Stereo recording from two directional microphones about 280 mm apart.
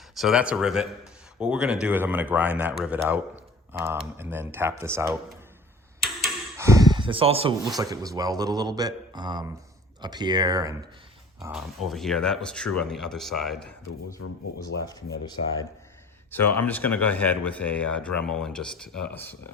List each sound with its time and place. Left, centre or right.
0.1 s speech: centre
6.0 s tick-tock: centre
6.7 s a sound: centre
7.8 s speech: centre
11.3 s speech: centre